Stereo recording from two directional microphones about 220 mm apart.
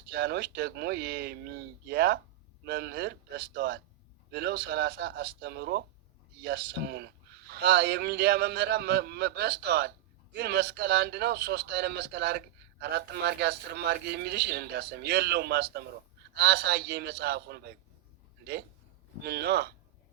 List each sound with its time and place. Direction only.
0.1 s a man's voice: 50° right (ahead or behind)
19.2 s a man's voice: 45° right (ahead or behind)